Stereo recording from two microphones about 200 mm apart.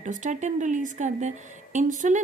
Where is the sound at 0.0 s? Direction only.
40° right (ahead or behind).